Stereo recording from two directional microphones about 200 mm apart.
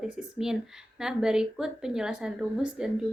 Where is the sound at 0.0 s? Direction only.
5° right (ahead or behind).